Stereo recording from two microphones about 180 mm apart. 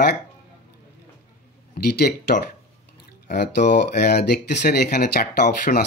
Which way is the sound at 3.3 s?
65° left (ahead or behind).